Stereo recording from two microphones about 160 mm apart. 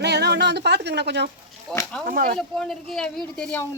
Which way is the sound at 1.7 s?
5° left (ahead or behind).